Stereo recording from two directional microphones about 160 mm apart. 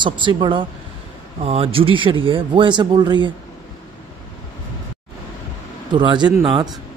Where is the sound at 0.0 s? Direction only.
30° right (ahead or behind).